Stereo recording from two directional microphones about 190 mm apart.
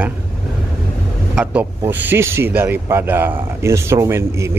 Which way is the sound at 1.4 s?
10° right (ahead or behind).